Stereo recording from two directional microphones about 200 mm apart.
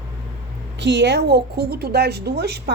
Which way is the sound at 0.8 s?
60° right (ahead or behind).